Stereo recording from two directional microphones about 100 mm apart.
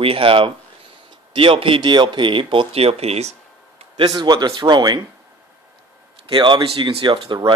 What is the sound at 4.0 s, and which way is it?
Speech, 45° right (ahead or behind).